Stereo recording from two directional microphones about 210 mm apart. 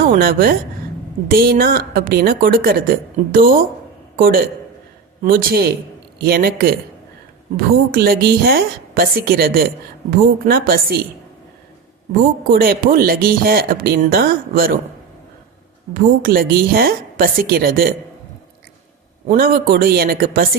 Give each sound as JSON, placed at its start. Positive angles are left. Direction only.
{"t": 0.1, "sound": "speech", "side_deg": -45}
{"t": 12.5, "sound": "speech", "side_deg": -45}
{"t": 16.0, "sound": "speech", "side_deg": -45}
{"t": 19.3, "sound": "speech", "side_deg": -45}